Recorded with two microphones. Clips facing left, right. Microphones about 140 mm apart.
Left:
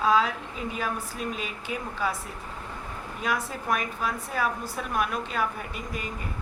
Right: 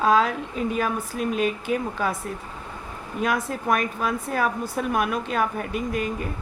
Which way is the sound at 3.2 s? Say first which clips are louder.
Right 5 dB; 55° right (ahead or behind).